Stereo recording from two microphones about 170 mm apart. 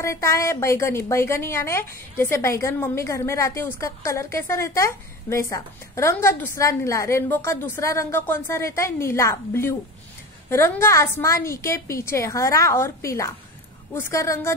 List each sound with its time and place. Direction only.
0.0 s a woman's voice: 15° left (ahead or behind)